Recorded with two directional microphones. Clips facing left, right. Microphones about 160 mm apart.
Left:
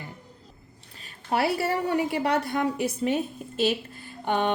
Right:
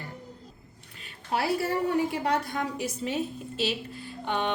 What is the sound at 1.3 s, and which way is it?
A woman's voice, 65° left (ahead or behind).